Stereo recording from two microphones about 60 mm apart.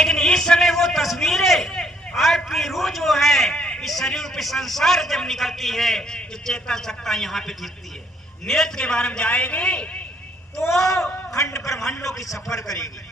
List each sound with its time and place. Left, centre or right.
0.0 s a sound: centre
2.4 s a man's voice: centre
3.6 s a sound: centre
3.8 s a man's voice: centre
11.3 s a man's voice: left
12.3 s a man's voice: centre